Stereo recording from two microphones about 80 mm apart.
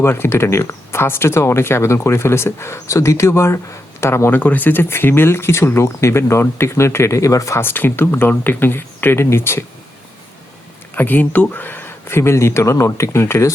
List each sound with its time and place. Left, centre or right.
0.0 s speech: left
10.9 s speech: left